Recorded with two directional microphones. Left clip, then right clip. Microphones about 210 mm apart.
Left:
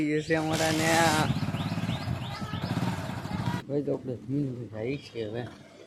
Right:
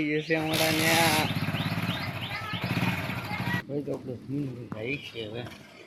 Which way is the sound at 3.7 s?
15° left (ahead or behind).